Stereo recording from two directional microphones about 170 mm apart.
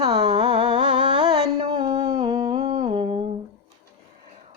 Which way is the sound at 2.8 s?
30° right (ahead or behind).